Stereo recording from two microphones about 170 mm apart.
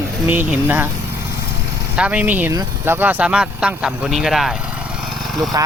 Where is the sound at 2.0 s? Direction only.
10° right (ahead or behind).